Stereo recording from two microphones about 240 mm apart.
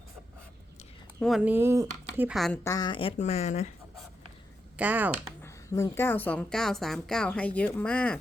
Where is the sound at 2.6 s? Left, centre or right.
Centre.